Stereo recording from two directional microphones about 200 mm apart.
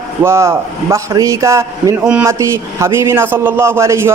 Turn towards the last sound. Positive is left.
turn(degrees=-15)  # may be behind; listen again after turning